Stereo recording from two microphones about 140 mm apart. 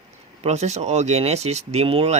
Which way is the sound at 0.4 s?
50° right (ahead or behind).